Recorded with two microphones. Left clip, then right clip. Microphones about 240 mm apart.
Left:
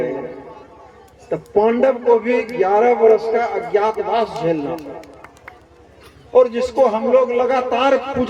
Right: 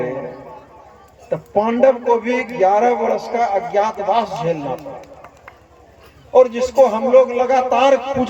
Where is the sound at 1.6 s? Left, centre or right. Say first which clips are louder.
Right 1 dB; right.